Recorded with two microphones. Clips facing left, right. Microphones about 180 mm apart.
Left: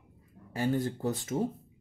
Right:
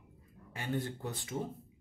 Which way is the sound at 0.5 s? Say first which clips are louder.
Left 7 dB; 40° left (ahead or behind).